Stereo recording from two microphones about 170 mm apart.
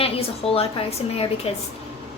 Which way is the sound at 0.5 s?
35° left (ahead or behind).